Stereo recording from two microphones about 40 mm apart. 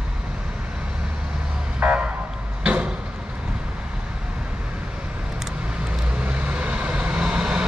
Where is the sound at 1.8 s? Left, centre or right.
Right.